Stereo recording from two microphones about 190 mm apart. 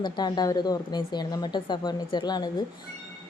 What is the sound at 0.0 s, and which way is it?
Speech, 20° left (ahead or behind).